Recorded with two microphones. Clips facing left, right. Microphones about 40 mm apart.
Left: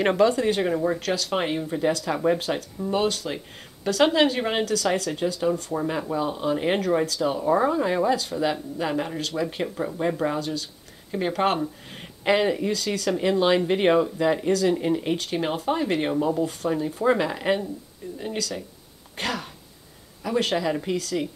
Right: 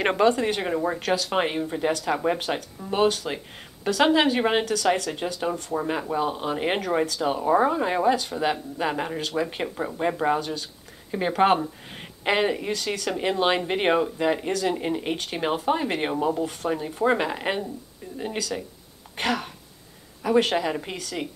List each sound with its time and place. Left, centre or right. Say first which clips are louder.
0.2 s a woman's voice: left 1 dB; centre